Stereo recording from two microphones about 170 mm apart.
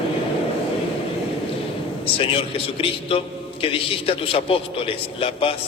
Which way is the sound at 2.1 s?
35° left (ahead or behind).